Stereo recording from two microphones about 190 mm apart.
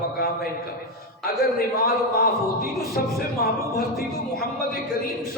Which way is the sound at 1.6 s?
55° left (ahead or behind).